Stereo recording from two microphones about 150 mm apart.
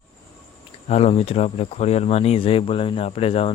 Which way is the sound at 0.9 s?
45° left (ahead or behind).